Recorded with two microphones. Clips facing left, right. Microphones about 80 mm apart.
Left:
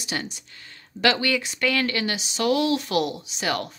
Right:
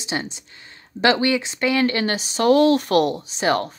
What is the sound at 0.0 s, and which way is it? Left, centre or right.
Speech, right.